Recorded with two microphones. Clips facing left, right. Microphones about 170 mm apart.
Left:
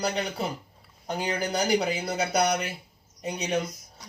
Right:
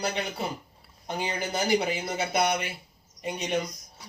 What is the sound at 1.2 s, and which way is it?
Speech, 40° left (ahead or behind).